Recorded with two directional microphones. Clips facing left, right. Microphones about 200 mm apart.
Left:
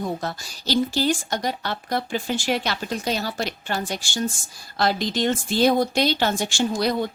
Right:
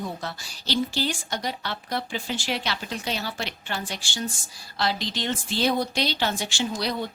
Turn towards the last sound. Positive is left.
turn(degrees=50)  # may be behind; listen again after turning